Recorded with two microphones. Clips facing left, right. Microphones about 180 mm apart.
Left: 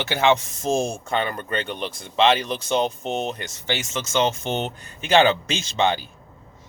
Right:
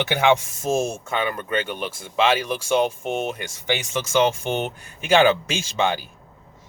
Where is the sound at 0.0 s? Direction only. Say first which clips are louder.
Right 1 dB; 15° right (ahead or behind).